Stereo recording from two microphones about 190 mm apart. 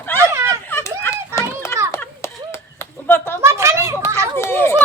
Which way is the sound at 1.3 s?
15° left (ahead or behind).